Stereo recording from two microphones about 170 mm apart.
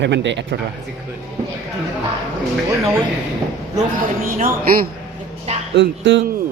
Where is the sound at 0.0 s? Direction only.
90° right.